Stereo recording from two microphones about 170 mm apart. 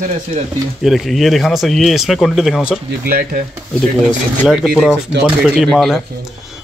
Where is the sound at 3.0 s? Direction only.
60° right (ahead or behind).